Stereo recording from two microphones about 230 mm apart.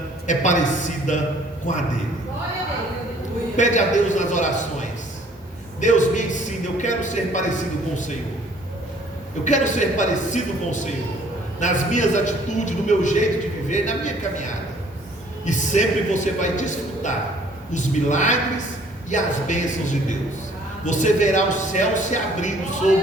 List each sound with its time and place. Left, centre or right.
0.3 s a man's voice: left
3.6 s a man's voice: left
5.8 s a man's voice: left
9.4 s a man's voice: left